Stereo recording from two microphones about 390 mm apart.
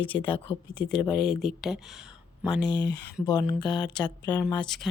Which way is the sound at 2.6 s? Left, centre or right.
Left.